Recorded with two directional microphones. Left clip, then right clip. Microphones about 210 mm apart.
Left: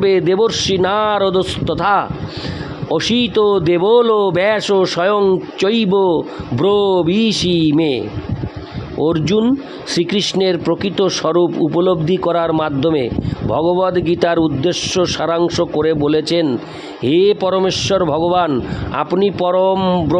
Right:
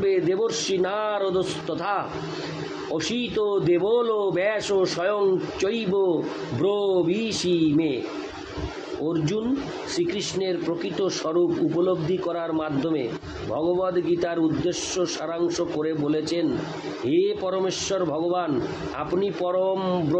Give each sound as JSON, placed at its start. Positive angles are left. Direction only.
{"t": 0.0, "sound": "a man's voice", "side_deg": 55}
{"t": 9.0, "sound": "a man's voice", "side_deg": 50}